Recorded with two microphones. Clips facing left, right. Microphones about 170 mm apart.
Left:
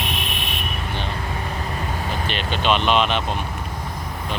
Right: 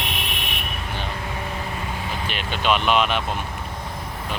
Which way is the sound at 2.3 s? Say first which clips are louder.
Left 1 dB; 10° right (ahead or behind).